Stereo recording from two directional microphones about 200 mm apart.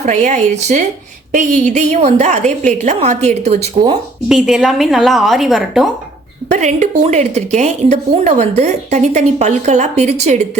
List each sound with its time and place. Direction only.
0.0 s a woman's voice: 35° right (ahead or behind)
4.3 s a woman's voice: centre (ahead or behind)
6.5 s a woman's voice: 35° right (ahead or behind)